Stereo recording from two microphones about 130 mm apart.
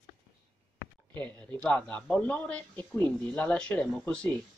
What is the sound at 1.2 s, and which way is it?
Speech, 10° left (ahead or behind).